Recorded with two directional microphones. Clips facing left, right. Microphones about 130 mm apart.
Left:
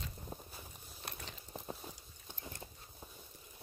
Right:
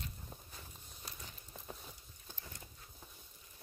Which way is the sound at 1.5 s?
30° left (ahead or behind).